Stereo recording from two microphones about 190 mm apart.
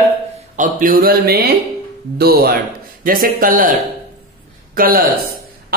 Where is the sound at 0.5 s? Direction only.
45° right (ahead or behind).